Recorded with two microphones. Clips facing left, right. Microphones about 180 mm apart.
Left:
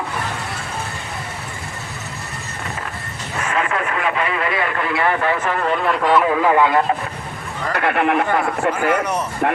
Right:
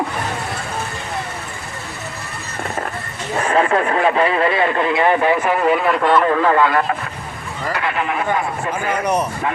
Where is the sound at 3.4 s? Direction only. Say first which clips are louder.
Right 6 dB; 35° right (ahead or behind); by 6.8 s 15° left (ahead or behind).